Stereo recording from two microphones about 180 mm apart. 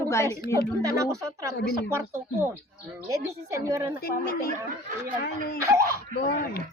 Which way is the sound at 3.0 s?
15° right (ahead or behind).